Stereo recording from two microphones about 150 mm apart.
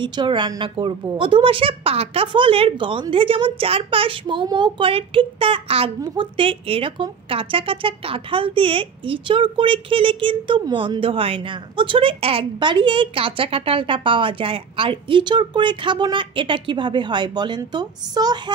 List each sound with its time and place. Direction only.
0.0 s a woman's voice: 30° right (ahead or behind)